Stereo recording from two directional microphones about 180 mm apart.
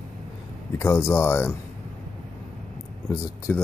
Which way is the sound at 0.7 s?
15° left (ahead or behind).